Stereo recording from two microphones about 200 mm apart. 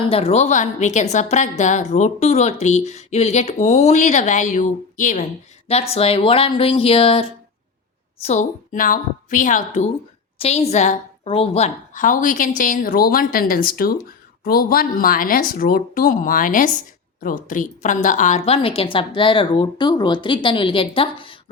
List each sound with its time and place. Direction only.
0.1 s a woman's voice: 30° left (ahead or behind)